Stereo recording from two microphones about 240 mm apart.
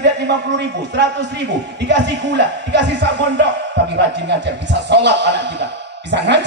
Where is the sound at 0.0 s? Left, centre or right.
Right.